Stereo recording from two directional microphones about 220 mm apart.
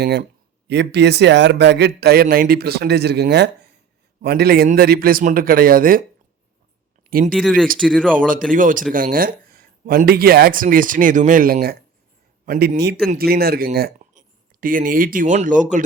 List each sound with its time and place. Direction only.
0.0 s speech: 45° right (ahead or behind)
7.1 s speech: 40° right (ahead or behind)
7.3 s speech: centre (ahead or behind)
8.3 s speech: 40° right (ahead or behind)